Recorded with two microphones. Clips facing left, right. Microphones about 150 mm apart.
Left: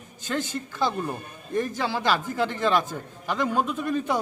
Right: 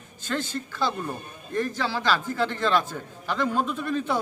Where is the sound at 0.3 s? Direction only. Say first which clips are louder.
Left 1 dB; 15° left (ahead or behind).